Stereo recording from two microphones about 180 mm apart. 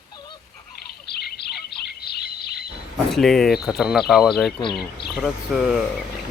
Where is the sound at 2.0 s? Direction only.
60° left (ahead or behind).